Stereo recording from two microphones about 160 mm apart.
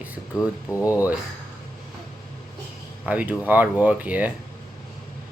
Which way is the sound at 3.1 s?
10° right (ahead or behind).